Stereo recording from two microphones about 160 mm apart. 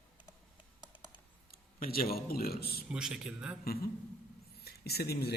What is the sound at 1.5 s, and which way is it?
Speech, 65° left (ahead or behind).